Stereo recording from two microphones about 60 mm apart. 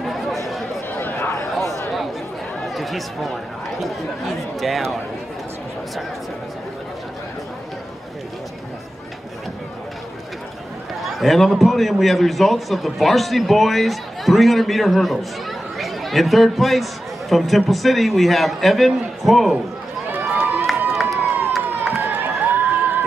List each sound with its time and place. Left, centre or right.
0.0 s chatter: centre
0.9 s a sound: left
2.6 s chatter: centre
3.8 s a man's voice: centre
11.0 s a man's voice: centre
20.1 s run: right
20.6 s run: centre
21.9 s a sound: right